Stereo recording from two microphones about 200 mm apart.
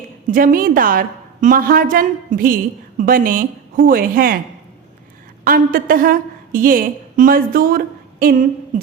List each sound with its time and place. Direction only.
0.3 s a woman's voice: 45° right (ahead or behind)
5.5 s a woman's voice: 45° right (ahead or behind)